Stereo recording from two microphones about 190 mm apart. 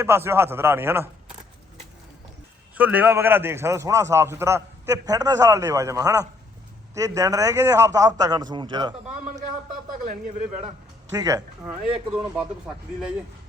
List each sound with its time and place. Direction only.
0.0 s a man's voice: 15° right (ahead or behind)
2.7 s a man's voice: 10° right (ahead or behind)
10.0 s speech: 45° right (ahead or behind)
11.1 s speech: 20° right (ahead or behind)
12.6 s speech: 5° right (ahead or behind)